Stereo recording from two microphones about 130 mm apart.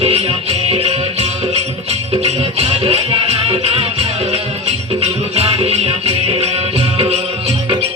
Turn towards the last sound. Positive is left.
turn(degrees=-50)  # may be behind; listen again after turning